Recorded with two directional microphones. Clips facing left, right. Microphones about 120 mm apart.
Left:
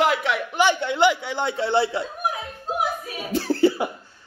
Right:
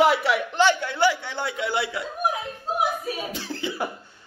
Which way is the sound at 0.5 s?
15° left (ahead or behind).